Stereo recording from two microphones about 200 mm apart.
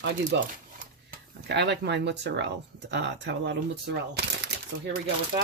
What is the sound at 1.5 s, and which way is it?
Speech, 60° right (ahead or behind).